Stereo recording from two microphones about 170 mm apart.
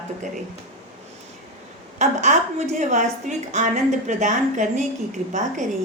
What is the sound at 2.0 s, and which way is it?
A woman's voice, 45° right (ahead or behind).